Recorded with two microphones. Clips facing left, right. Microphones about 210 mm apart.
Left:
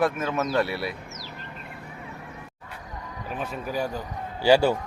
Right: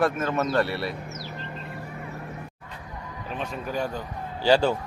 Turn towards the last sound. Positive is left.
turn(degrees=10)  # may be behind; listen again after turning